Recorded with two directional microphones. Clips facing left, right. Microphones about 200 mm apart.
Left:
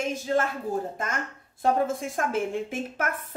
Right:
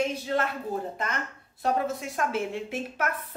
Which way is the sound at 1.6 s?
50° left (ahead or behind).